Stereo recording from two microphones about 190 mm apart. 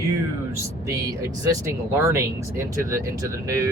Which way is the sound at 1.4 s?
15° right (ahead or behind).